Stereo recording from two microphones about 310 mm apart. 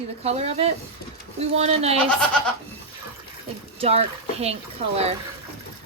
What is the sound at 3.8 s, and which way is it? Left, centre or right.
Speech, centre.